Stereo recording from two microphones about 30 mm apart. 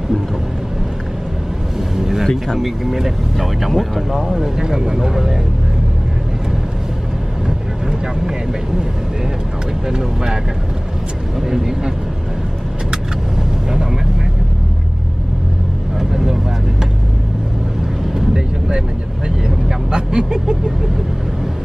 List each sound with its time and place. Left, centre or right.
2.0 s vehicle: centre
2.6 s speech: centre
4.4 s speech: right
4.9 s speech: centre
9.8 s speech: right
11.4 s speech: centre
16.0 s vehicle: centre
19.2 s speech: right